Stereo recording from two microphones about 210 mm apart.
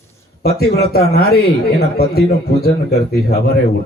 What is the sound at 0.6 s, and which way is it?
Speech, 50° left (ahead or behind).